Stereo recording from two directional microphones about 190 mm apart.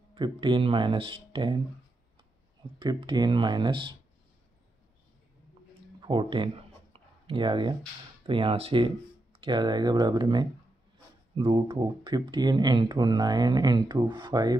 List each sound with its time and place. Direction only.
0.1 s speech: 25° right (ahead or behind)
2.6 s speech: 25° right (ahead or behind)
5.9 s a sound: 25° right (ahead or behind)
8.3 s speech: 30° right (ahead or behind)